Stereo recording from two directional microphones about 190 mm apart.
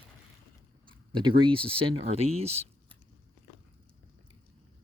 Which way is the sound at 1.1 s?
25° right (ahead or behind).